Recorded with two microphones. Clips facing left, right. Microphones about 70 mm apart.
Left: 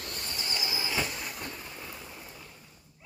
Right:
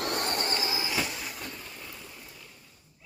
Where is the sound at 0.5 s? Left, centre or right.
Right.